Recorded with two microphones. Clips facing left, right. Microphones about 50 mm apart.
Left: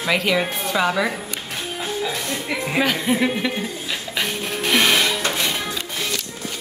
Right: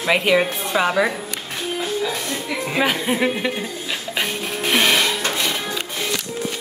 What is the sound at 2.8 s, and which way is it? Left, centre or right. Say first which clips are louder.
Speech: right 1 dB; centre.